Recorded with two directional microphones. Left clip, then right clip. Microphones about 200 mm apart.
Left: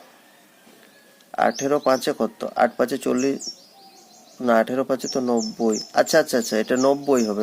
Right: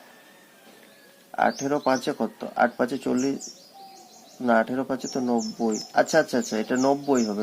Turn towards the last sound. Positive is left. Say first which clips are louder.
# left 4 dB
turn(degrees=40)  # may be behind; listen again after turning